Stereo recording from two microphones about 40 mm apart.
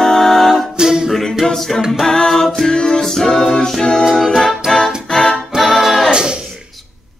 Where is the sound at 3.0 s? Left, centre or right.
Centre.